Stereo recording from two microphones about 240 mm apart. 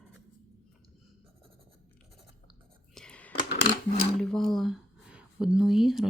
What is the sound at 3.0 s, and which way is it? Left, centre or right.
Whispering, centre.